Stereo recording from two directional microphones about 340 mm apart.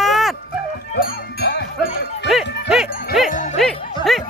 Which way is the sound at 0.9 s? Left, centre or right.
Left.